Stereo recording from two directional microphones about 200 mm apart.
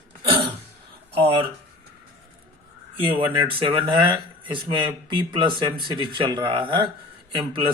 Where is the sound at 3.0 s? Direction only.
25° right (ahead or behind).